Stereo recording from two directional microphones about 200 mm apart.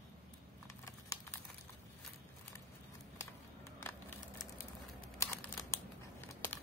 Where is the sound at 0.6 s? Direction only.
15° left (ahead or behind).